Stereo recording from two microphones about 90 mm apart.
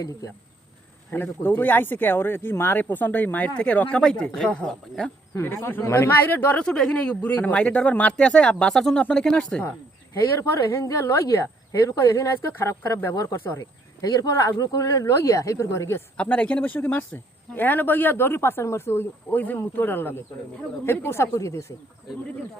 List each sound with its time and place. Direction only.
1.1 s speech: 25° left (ahead or behind)
5.3 s speech: 30° left (ahead or behind)
6.7 s speech: 5° left (ahead or behind)
10.7 s speech: 35° left (ahead or behind)
14.0 s speech: 40° left (ahead or behind)
16.1 s speech: 15° left (ahead or behind); by 21.7 s 35° left (ahead or behind)